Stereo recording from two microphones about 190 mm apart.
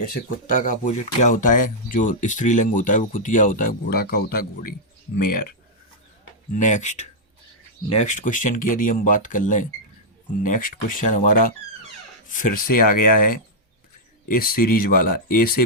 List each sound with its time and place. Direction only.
0.1 s speech: 45° left (ahead or behind)